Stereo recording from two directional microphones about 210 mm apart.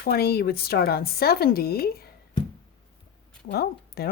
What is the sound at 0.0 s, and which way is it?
Speech, 50° left (ahead or behind).